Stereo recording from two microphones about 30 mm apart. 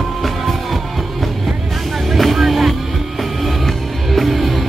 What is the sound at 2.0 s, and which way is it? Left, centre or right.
Vehicle, centre.